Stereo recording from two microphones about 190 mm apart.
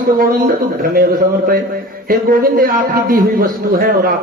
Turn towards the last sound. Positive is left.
turn(degrees=-50)  # may be behind; listen again after turning